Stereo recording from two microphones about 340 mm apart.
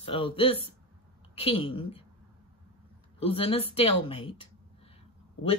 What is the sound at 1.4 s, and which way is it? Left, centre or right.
Speech, centre.